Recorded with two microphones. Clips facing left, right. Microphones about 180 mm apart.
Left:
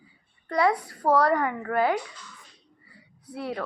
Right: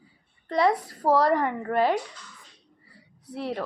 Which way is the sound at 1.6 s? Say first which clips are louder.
Right 1 dB; 30° right (ahead or behind).